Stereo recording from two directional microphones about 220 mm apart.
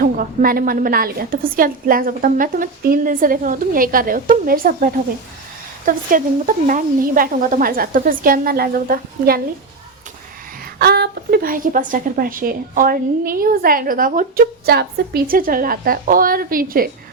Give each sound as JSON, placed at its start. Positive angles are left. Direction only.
{"t": 0.0, "sound": "a woman's voice", "side_deg": -40}
{"t": 10.8, "sound": "a woman's voice", "side_deg": -45}